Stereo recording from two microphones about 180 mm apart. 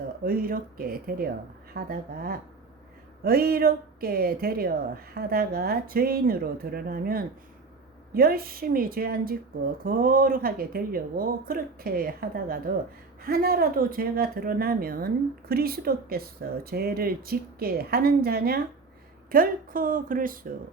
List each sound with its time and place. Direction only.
0.3 s a woman's voice: 55° right (ahead or behind)